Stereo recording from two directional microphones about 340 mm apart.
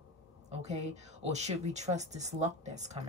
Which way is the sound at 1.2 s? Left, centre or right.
Centre.